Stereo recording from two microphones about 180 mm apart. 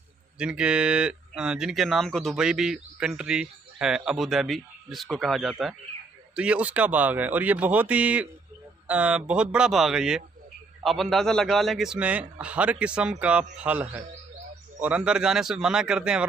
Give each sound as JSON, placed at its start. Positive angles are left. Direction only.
{"t": 0.4, "sound": "speech", "side_deg": -5}